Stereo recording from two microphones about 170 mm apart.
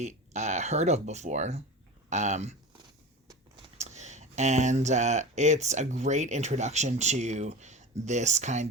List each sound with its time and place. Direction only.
0.0 s speech: 40° right (ahead or behind)
3.8 s speech: 45° right (ahead or behind)